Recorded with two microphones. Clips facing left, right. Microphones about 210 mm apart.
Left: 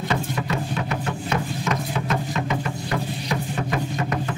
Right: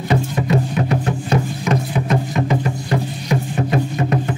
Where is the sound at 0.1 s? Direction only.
30° right (ahead or behind).